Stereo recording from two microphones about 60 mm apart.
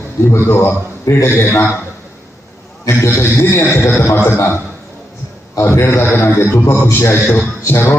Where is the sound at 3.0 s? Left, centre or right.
Left.